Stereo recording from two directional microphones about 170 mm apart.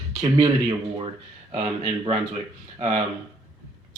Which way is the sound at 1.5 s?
35° right (ahead or behind).